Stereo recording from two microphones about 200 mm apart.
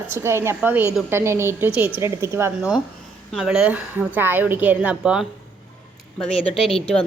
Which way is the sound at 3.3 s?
5° right (ahead or behind).